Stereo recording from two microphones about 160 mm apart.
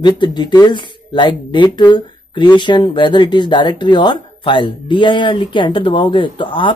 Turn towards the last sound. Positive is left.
turn(degrees=30)  # may be behind; listen again after turning